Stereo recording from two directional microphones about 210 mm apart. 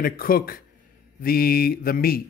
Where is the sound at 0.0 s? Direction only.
45° left (ahead or behind).